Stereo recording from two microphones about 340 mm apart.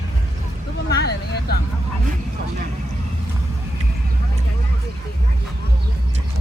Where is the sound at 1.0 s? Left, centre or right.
Left.